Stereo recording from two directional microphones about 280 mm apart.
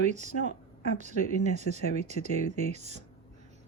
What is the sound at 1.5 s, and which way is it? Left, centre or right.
Speech, right.